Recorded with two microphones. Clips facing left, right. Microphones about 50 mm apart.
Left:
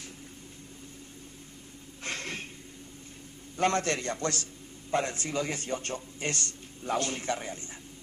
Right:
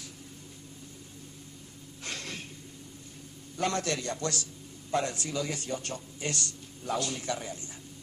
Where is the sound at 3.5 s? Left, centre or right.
Left.